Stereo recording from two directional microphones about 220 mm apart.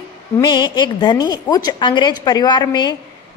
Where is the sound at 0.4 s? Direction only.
20° left (ahead or behind).